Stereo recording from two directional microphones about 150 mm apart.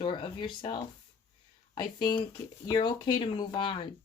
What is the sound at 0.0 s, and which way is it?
Speech, 30° left (ahead or behind).